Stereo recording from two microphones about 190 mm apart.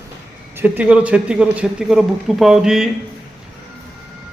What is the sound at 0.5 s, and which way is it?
Speech, 10° right (ahead or behind).